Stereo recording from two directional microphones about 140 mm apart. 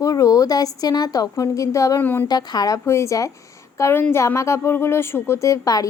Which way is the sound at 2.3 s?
30° left (ahead or behind).